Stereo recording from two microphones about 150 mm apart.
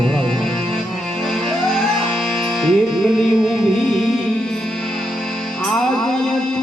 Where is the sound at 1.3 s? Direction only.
Centre (ahead or behind).